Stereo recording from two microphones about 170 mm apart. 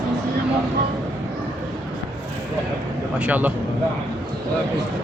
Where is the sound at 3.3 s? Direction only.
10° right (ahead or behind).